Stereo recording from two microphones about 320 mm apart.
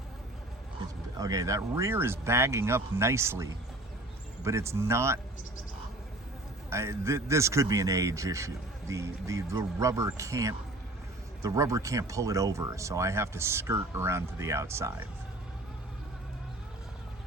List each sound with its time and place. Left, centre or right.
1.2 s a man's voice: centre
6.7 s a man's voice: centre